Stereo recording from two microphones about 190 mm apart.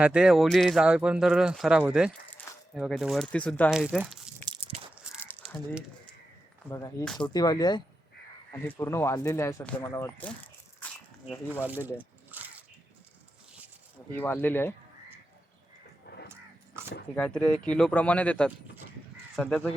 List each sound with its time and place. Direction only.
0.0 s speech: 5° right (ahead or behind)
3.8 s speech: 5° right (ahead or behind)
4.4 s biting: 25° right (ahead or behind)
6.7 s speech: 15° left (ahead or behind)
7.0 s speech: centre (ahead or behind)
7.3 s speech: 20° left (ahead or behind)
8.5 s speech: 10° left (ahead or behind)
11.6 s a sound: 10° right (ahead or behind)
14.2 s speech: 10° left (ahead or behind)
16.1 s a sound: 60° left (ahead or behind)
17.2 s speech: 5° left (ahead or behind)